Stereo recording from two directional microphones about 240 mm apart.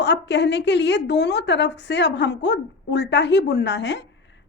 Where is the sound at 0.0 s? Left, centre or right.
Left.